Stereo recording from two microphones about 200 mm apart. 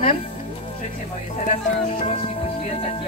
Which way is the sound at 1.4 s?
30° left (ahead or behind).